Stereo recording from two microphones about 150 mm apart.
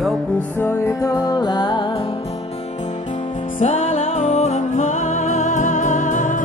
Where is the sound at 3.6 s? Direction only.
45° left (ahead or behind).